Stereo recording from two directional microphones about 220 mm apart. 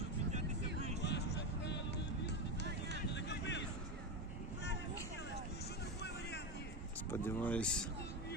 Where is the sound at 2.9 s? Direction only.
50° left (ahead or behind).